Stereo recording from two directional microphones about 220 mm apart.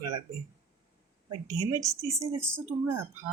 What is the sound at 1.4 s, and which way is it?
Speech, 15° right (ahead or behind).